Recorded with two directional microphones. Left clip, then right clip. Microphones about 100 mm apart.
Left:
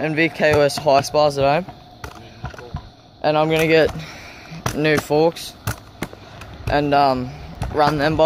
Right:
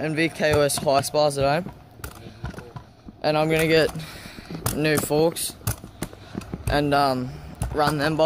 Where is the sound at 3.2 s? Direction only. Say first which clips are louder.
Left 4 dB; 35° right (ahead or behind).